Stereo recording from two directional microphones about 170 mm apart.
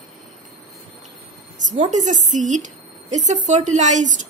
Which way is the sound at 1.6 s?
45° right (ahead or behind).